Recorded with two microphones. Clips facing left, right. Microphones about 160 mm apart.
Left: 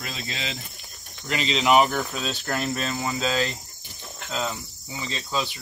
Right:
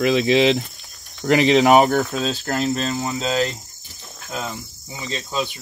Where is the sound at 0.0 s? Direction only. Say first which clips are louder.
Right 19 dB; 90° right.